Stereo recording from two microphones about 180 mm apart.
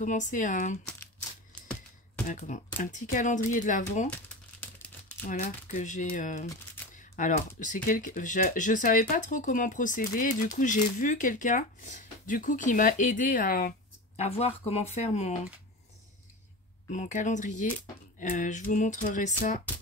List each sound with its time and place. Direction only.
0.0 s speech: 45° left (ahead or behind)
1.5 s typewriter: 5° left (ahead or behind)
2.2 s speech: 45° left (ahead or behind)
4.1 s crumpling: 5° left (ahead or behind)
5.2 s speech: 50° left (ahead or behind)
14.1 s speech: 35° left (ahead or behind)
16.9 s speech: 45° left (ahead or behind)